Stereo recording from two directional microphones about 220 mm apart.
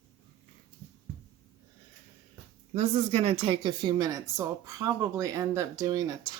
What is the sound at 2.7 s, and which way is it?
Speech, 30° right (ahead or behind).